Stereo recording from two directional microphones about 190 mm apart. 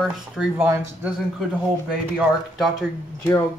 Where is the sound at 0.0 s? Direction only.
5° right (ahead or behind).